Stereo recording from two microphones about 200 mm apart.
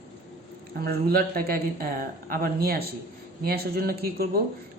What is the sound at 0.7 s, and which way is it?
A woman's voice, 50° right (ahead or behind).